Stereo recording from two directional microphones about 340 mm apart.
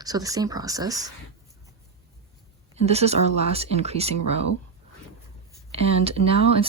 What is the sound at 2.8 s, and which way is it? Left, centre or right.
Speech, centre.